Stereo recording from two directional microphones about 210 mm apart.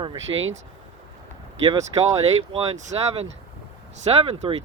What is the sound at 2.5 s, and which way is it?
Speech, 30° right (ahead or behind).